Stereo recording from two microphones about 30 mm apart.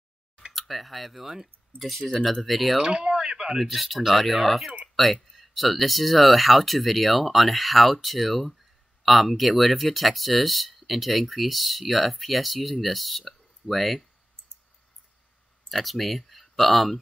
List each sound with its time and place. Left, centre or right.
0.5 s speech: centre
1.2 s speech: centre
1.8 s speech: centre
2.8 s a sound: right
3.7 s speech: centre
15.7 s speech: centre